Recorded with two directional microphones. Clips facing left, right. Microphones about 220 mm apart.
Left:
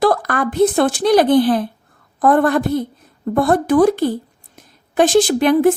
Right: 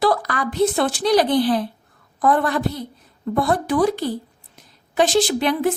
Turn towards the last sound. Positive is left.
turn(degrees=50)  # may be behind; listen again after turning